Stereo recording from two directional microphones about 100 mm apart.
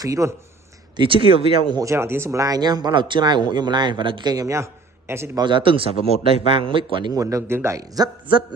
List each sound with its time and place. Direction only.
0.0 s speech: 35° right (ahead or behind)
0.9 s speech: 60° right (ahead or behind)
1.8 s speech: 25° right (ahead or behind)
5.4 s speech: 55° right (ahead or behind)
7.2 s speech: 30° right (ahead or behind)